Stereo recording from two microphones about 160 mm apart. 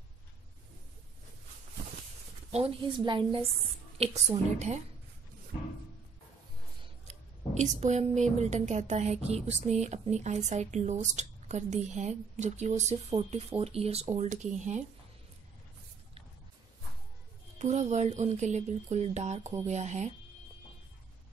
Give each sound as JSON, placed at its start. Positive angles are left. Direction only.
{"t": 2.5, "sound": "a woman's voice", "side_deg": -30}
{"t": 4.0, "sound": "speech", "side_deg": -40}
{"t": 7.1, "sound": "speech", "side_deg": -45}
{"t": 17.6, "sound": "speech", "side_deg": -45}